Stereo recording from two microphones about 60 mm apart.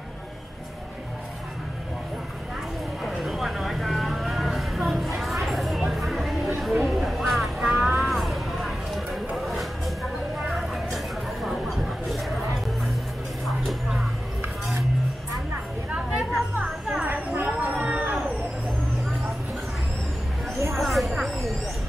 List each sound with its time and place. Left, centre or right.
3.0 s vehicle: centre
7.8 s music: centre
9.4 s a sound: centre
11.4 s music: centre
13.5 s music: centre
16.1 s a sound: centre
17.0 s a sound: right
17.5 s music: right
20.7 s vehicle: centre